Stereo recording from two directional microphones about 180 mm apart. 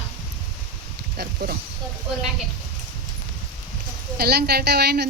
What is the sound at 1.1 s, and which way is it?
Speech, 60° right (ahead or behind).